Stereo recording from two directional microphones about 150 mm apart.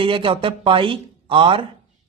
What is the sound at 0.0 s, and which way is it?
Speech, 35° right (ahead or behind).